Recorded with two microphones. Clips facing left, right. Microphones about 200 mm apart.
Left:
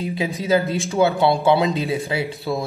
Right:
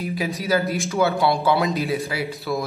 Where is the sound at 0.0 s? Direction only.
30° left (ahead or behind).